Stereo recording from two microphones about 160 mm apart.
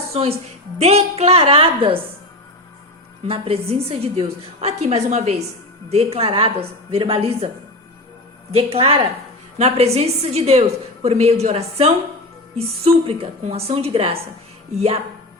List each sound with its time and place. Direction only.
0.1 s a woman's voice: 40° right (ahead or behind)
3.2 s a woman's voice: 35° right (ahead or behind)
8.5 s a woman's voice: 35° right (ahead or behind)